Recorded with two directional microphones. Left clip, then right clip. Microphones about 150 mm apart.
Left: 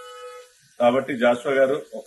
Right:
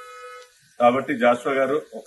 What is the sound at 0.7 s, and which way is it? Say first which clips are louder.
A man's voice: right 1 dB; 15° left (ahead or behind).